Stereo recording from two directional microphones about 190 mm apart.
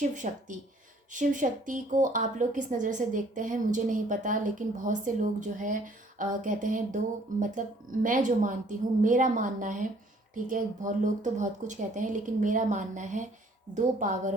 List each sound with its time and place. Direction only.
0.0 s a woman's voice: 40° right (ahead or behind)